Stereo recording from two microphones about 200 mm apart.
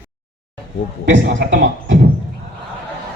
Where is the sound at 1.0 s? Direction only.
65° right (ahead or behind).